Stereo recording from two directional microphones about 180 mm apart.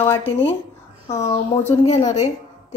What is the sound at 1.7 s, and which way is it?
Speech, 30° left (ahead or behind).